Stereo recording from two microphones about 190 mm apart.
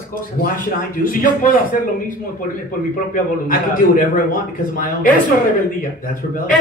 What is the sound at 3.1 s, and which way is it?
A man's voice, 45° left (ahead or behind).